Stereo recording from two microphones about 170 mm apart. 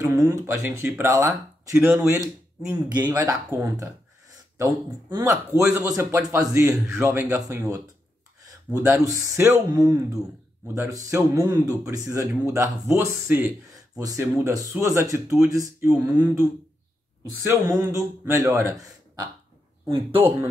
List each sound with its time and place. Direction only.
0.0 s speech: 20° right (ahead or behind)
17.5 s speech: 20° right (ahead or behind)
20.2 s speech: 15° right (ahead or behind)